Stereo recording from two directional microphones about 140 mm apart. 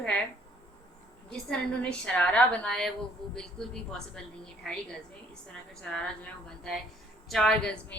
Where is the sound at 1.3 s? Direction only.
5° left (ahead or behind).